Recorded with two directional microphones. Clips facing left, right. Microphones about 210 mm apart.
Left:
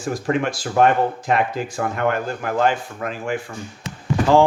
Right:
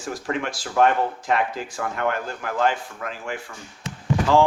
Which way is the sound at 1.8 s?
55° left (ahead or behind).